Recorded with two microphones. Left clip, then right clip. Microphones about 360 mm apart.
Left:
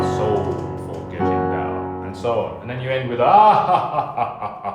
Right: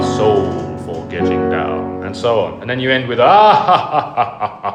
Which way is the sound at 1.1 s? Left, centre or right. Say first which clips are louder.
Right 4 dB; right.